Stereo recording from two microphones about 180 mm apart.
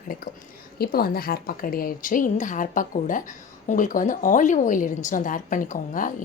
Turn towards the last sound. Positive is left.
turn(degrees=50)  # may be behind; listen again after turning